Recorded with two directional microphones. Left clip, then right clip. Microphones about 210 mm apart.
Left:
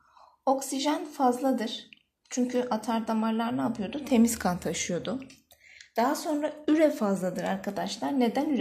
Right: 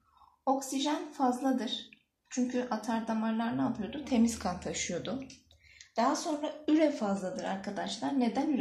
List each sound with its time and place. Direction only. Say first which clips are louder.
0.7 s a woman's voice: left 4 dB; 35° left (ahead or behind)